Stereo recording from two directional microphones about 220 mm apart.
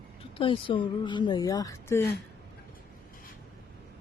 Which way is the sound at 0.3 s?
25° left (ahead or behind).